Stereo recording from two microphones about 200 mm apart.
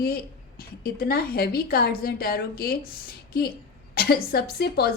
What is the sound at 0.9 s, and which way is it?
A woman's voice, 50° left (ahead or behind).